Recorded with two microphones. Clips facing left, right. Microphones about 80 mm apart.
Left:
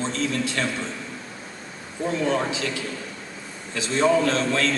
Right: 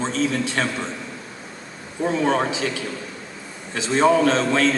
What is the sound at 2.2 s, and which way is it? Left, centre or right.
Speech, right.